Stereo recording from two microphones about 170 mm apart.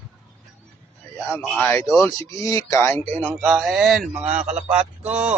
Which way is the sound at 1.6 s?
10° left (ahead or behind).